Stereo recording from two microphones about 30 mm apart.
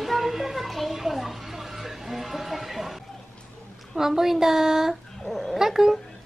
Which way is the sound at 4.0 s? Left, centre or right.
Centre.